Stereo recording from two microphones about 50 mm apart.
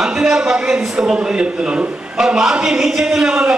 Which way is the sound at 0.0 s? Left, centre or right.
Centre.